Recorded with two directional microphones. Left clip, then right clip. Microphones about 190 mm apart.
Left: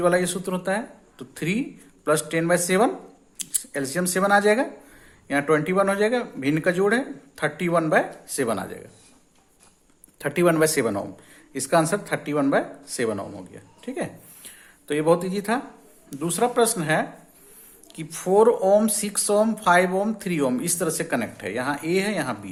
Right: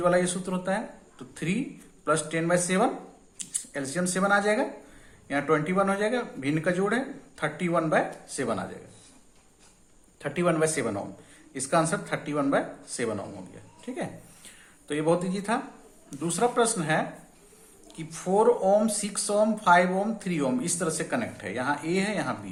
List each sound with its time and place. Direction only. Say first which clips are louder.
0.0 s speech: left 3 dB; 50° left (ahead or behind)
10.2 s speech: left 6 dB; 55° left (ahead or behind)